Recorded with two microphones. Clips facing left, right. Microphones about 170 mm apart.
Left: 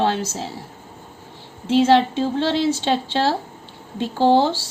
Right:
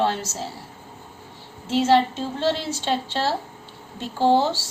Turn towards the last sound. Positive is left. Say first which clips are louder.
# left 3 dB
turn(degrees=65)  # may be behind; listen again after turning